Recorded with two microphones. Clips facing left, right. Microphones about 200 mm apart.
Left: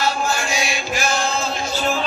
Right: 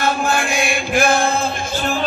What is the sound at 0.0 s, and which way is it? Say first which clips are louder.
Chant: right 3 dB; 55° right (ahead or behind).